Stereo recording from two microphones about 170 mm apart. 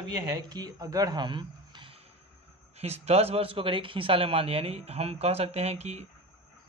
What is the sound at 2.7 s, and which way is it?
Speech, 40° right (ahead or behind).